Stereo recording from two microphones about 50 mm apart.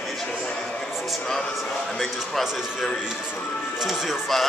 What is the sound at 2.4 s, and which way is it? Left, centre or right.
Speech, centre.